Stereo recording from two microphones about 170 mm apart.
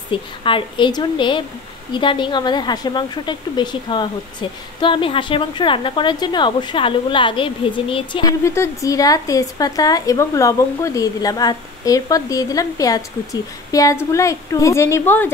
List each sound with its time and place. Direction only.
0.1 s a woman's voice: 30° left (ahead or behind); by 15.3 s 15° left (ahead or behind)